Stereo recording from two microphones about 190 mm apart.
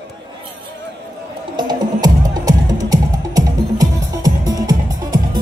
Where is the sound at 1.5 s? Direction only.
20° right (ahead or behind).